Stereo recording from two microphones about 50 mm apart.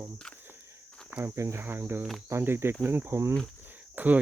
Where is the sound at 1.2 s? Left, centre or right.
Right.